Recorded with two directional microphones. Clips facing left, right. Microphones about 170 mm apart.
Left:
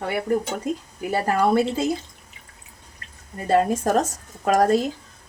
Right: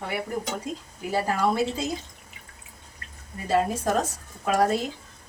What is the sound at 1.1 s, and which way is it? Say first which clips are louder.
Speech: left 4 dB; 60° left (ahead or behind).